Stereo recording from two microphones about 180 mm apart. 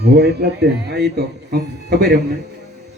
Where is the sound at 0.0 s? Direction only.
65° right (ahead or behind).